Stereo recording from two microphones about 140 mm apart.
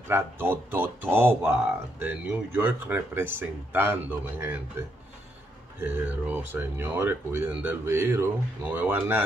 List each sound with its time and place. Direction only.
0.1 s speech: 15° right (ahead or behind)
5.8 s speech: 15° right (ahead or behind)